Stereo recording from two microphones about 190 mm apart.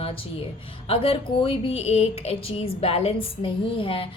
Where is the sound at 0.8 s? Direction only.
30° left (ahead or behind).